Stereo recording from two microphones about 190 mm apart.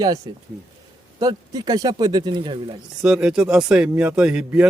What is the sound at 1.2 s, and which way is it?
Speech, 20° right (ahead or behind).